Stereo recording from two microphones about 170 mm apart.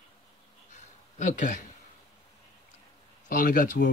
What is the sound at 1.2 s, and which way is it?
Speech, 50° left (ahead or behind).